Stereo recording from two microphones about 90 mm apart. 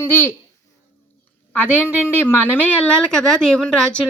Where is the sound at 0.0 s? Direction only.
25° left (ahead or behind).